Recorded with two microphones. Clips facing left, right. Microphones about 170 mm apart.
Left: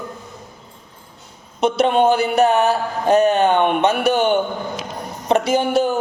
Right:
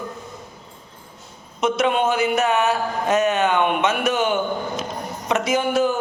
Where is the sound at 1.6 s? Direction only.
35° left (ahead or behind).